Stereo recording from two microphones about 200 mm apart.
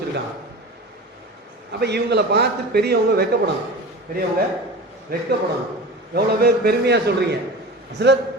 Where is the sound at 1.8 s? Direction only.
55° right (ahead or behind).